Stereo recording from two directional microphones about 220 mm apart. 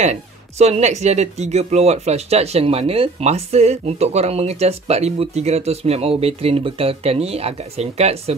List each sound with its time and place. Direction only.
0.0 s speech: 30° right (ahead or behind)